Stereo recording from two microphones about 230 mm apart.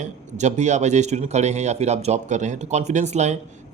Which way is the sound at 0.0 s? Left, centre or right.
Right.